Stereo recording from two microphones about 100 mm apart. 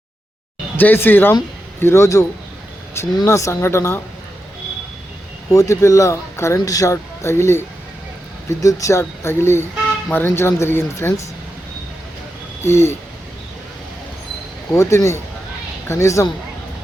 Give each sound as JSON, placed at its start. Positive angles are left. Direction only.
{"t": 0.8, "sound": "speech", "side_deg": 20}
{"t": 3.2, "sound": "speech", "side_deg": 30}
{"t": 5.5, "sound": "speech", "side_deg": 30}
{"t": 12.6, "sound": "speech", "side_deg": 25}
{"t": 14.7, "sound": "speech", "side_deg": 30}